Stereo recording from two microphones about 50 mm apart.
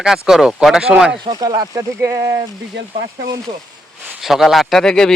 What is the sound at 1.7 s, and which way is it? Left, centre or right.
Speech, right.